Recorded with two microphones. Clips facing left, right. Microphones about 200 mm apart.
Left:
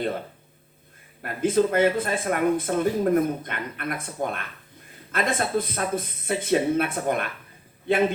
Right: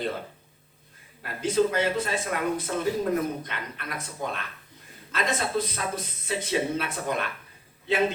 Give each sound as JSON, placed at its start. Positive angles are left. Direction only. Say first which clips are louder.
{"t": 1.2, "sound": "a man's voice", "louder": "left 3 dB", "side_deg": 55}